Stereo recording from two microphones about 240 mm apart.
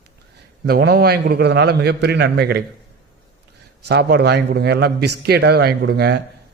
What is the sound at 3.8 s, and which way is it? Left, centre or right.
Speech, right.